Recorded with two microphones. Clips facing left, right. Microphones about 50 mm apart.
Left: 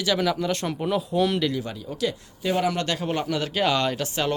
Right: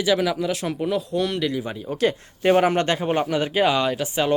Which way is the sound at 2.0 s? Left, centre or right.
Right.